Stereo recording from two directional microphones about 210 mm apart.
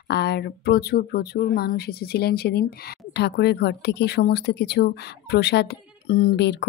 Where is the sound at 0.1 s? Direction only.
50° left (ahead or behind).